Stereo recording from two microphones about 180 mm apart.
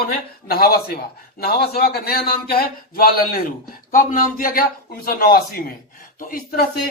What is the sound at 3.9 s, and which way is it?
A man's voice, 45° left (ahead or behind).